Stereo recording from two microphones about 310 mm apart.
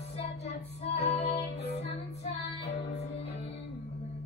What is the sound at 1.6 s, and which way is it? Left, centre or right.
Music, centre.